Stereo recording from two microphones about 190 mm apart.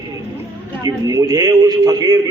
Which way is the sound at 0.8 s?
20° right (ahead or behind).